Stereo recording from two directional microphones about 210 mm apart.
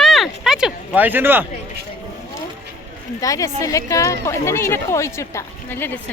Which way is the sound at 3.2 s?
15° left (ahead or behind).